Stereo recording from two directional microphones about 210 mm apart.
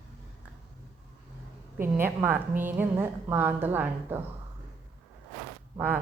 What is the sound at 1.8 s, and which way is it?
A woman's voice, 10° right (ahead or behind).